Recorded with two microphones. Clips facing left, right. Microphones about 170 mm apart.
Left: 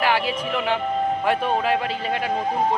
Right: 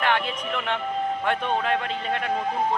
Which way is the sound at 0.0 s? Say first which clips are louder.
Left 3 dB; 5° left (ahead or behind).